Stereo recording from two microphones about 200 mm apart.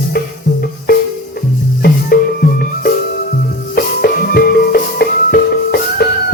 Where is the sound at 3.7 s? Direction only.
50° left (ahead or behind).